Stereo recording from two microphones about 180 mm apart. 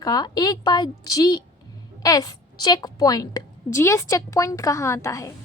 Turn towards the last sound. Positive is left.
turn(degrees=15)  # may be behind; listen again after turning